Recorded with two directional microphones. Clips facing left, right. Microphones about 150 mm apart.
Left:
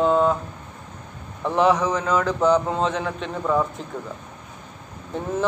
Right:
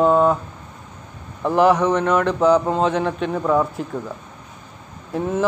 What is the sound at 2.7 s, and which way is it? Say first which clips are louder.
Speech: right 4 dB; 30° right (ahead or behind).